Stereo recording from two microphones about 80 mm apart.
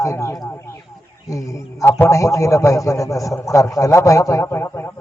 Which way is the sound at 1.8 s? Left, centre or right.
Left.